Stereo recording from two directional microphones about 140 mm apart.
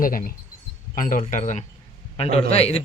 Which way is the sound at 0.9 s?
70° left (ahead or behind).